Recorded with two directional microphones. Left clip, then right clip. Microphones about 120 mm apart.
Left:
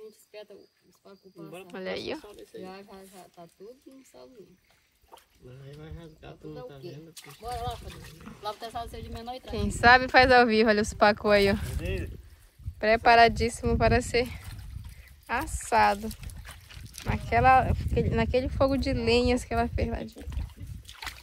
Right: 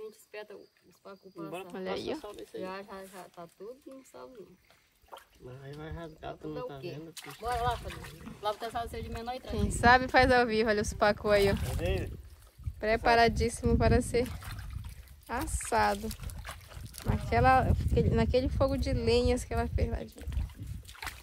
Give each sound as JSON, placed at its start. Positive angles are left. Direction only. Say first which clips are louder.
{"t": 1.7, "sound": "a woman's voice", "louder": "left 3 dB", "side_deg": -15}
{"t": 2.6, "sound": "speech", "louder": "right 4 dB", "side_deg": 0}
{"t": 5.9, "sound": "speech", "louder": "right 6 dB", "side_deg": -25}
{"t": 7.4, "sound": "speech", "louder": "right 3 dB", "side_deg": 0}
{"t": 9.5, "sound": "a woman's voice", "louder": "left 4 dB", "side_deg": -20}
{"t": 12.8, "sound": "a woman's voice", "louder": "left 6 dB", "side_deg": -10}
{"t": 15.2, "sound": "a woman's voice", "louder": "left 5 dB", "side_deg": -15}
{"t": 16.6, "sound": "dog", "louder": "left 6 dB", "side_deg": -10}
{"t": 17.2, "sound": "a woman's voice", "louder": "left 4 dB", "side_deg": -20}
{"t": 20.3, "sound": "boat", "louder": "left 1 dB", "side_deg": 0}